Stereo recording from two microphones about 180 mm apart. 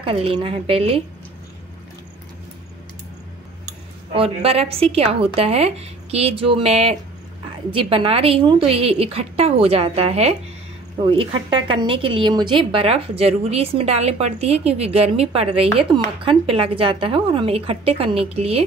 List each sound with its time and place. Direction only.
0.0 s a woman's voice: 30° right (ahead or behind)
4.1 s a woman's voice: 30° right (ahead or behind)